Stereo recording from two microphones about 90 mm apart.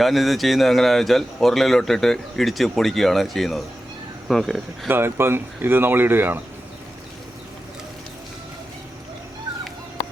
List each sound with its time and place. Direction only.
0.0 s speech: centre (ahead or behind)
4.9 s speech: 25° right (ahead or behind)